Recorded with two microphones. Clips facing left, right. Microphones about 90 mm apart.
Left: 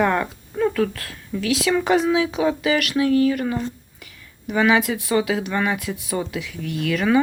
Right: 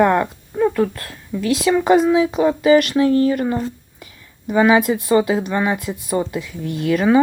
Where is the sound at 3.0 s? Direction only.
40° right (ahead or behind).